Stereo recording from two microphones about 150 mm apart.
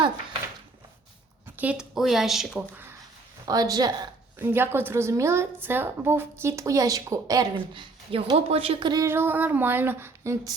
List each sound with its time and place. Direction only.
1.5 s a woman's voice: 5° right (ahead or behind)
3.4 s a woman's voice: 25° right (ahead or behind)
4.4 s a woman's voice: 15° right (ahead or behind)
9.0 s a sound: 15° right (ahead or behind)